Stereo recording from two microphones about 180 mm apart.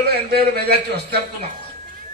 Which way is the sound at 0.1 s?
65° right (ahead or behind).